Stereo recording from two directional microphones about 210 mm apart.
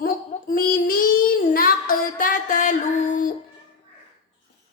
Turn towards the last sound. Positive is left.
turn(degrees=35)  # may be behind; listen again after turning